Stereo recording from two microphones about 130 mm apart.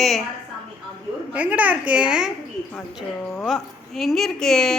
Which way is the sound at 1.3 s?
10° right (ahead or behind).